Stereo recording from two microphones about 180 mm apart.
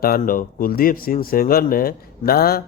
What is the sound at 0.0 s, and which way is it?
A man's voice, 55° left (ahead or behind).